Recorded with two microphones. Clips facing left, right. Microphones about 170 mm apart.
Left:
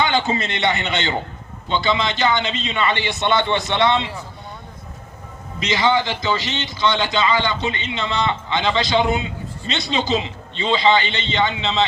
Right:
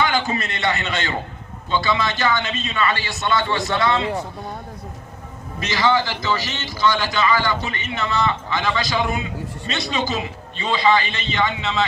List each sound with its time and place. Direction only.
0.0 s a man's voice: 25° left (ahead or behind)
5.5 s a man's voice: 20° left (ahead or behind)